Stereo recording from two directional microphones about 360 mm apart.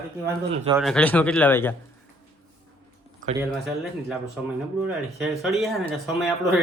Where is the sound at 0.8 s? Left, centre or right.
Centre.